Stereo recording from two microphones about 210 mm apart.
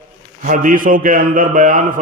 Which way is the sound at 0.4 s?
40° right (ahead or behind).